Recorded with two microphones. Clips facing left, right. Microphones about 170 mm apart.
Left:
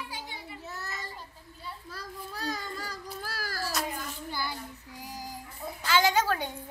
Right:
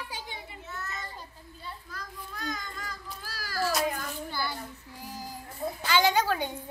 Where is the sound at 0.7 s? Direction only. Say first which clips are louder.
Right 1 dB; 35° left (ahead or behind).